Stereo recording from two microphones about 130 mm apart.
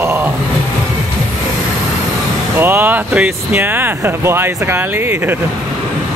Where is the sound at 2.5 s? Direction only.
15° right (ahead or behind).